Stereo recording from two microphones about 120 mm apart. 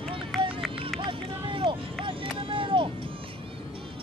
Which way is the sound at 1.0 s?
45° right (ahead or behind).